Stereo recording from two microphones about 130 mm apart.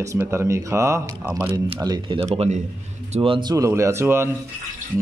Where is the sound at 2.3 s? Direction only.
55° right (ahead or behind).